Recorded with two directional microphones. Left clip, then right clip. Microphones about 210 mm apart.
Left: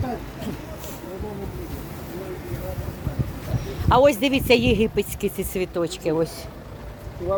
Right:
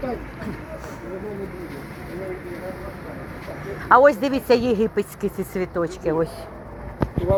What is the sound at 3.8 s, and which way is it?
Speech, 15° left (ahead or behind).